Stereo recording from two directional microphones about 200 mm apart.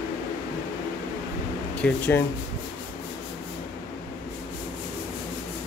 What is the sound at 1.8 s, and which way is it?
Speech, 10° left (ahead or behind).